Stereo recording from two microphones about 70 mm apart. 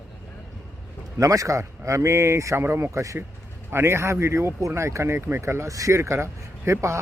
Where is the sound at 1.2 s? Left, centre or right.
Right.